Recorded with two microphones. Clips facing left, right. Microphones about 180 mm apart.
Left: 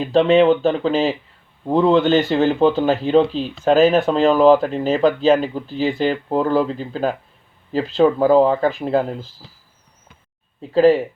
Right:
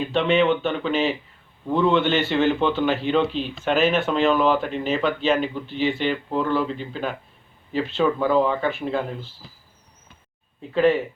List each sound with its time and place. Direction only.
0.0 s speech: 35° left (ahead or behind)
10.7 s speech: 35° left (ahead or behind)